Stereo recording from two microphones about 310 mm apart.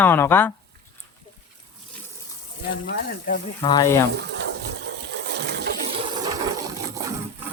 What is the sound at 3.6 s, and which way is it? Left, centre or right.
Speech, centre.